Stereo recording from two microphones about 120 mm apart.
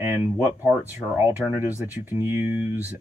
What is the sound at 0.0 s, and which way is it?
Speech, 15° right (ahead or behind).